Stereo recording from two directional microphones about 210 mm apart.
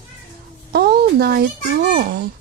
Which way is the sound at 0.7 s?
50° right (ahead or behind).